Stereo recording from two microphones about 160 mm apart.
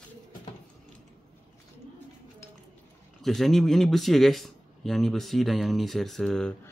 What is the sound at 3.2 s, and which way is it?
Speech, centre (ahead or behind).